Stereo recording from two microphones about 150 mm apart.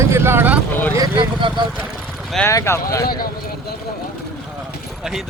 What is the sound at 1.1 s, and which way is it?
Speech, 30° right (ahead or behind).